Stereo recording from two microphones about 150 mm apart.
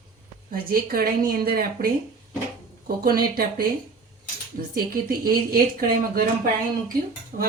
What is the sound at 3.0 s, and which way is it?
A woman's voice, 85° right.